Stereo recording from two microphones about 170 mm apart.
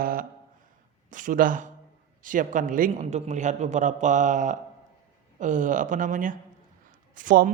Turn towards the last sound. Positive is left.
turn(degrees=-50)  # may be behind; listen again after turning